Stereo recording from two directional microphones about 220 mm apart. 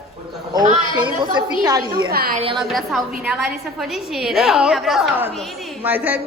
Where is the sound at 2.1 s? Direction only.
45° right (ahead or behind).